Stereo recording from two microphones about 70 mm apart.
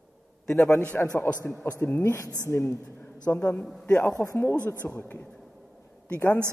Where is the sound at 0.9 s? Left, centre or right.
Centre.